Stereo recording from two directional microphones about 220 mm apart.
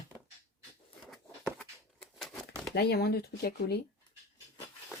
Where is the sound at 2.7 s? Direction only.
45° left (ahead or behind).